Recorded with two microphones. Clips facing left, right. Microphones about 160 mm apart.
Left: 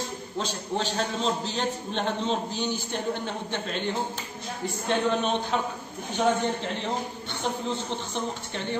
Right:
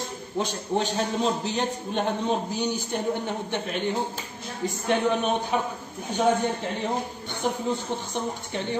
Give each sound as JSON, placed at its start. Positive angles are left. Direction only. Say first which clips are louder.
{"t": 0.4, "sound": "a man's voice", "louder": "right 4 dB", "side_deg": -15}